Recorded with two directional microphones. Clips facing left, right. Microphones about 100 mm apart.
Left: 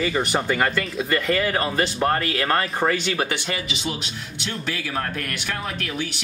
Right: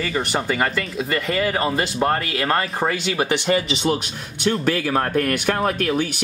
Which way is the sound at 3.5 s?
35° right (ahead or behind).